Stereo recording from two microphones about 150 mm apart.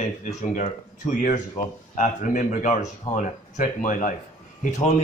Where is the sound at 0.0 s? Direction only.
50° left (ahead or behind).